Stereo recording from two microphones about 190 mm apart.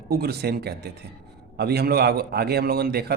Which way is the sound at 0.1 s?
55° right (ahead or behind).